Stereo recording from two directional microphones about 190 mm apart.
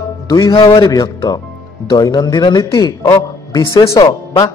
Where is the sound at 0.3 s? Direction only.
20° left (ahead or behind).